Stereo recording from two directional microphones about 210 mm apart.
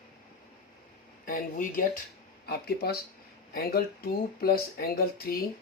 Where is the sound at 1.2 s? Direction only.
45° left (ahead or behind).